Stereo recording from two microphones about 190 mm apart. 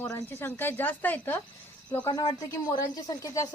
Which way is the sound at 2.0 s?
20° left (ahead or behind).